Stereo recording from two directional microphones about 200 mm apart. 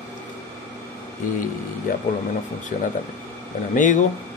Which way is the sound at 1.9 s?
45° left (ahead or behind).